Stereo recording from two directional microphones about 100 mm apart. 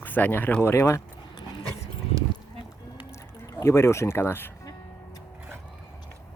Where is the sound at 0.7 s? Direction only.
30° left (ahead or behind).